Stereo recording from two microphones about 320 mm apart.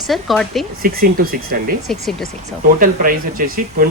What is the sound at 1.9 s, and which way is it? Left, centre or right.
Speech, centre.